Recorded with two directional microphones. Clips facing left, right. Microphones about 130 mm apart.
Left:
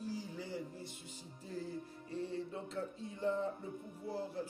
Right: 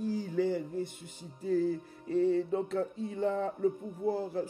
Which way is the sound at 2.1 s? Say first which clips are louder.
Right 14 dB; 75° right (ahead or behind).